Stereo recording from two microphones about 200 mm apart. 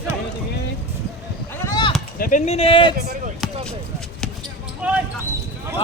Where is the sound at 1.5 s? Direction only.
15° left (ahead or behind).